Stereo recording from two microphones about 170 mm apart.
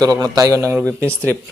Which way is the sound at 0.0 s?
20° right (ahead or behind).